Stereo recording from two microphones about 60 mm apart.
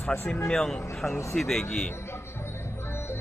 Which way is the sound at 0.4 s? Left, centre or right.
Centre.